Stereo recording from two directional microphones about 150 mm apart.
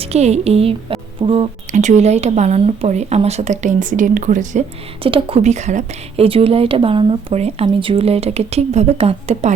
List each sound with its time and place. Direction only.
0.0 s a woman's voice: 45° right (ahead or behind)
5.0 s a woman's voice: 40° right (ahead or behind)